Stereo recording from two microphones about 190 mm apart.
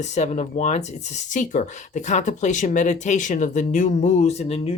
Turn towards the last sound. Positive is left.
turn(degrees=30)  # may be behind; listen again after turning